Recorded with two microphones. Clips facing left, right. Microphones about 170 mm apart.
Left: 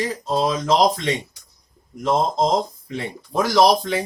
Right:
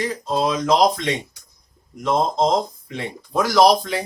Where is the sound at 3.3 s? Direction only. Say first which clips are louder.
Right 1 dB; 30° left (ahead or behind).